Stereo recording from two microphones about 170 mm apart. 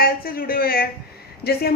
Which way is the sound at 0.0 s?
60° left (ahead or behind).